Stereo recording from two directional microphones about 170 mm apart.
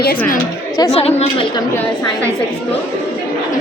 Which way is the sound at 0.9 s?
35° left (ahead or behind).